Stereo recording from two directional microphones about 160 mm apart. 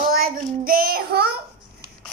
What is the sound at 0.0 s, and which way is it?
Child singing, 65° right (ahead or behind).